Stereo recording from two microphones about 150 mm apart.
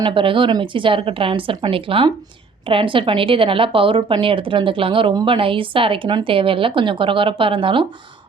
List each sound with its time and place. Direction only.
0.0 s speech: 35° right (ahead or behind)